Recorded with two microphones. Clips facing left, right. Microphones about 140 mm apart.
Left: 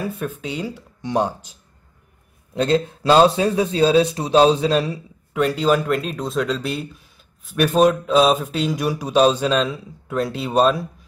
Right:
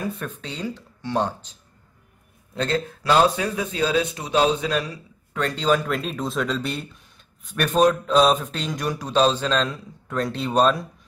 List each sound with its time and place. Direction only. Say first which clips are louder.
0.0 s speech: left 4 dB; 10° left (ahead or behind); by 5.0 s 30° left (ahead or behind)
5.3 s speech: left 4 dB; 10° left (ahead or behind)